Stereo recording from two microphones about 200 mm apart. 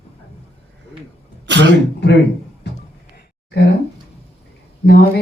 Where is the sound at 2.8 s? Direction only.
50° left (ahead or behind).